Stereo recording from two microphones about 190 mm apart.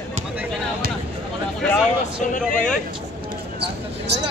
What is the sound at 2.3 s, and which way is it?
Speech, 45° left (ahead or behind).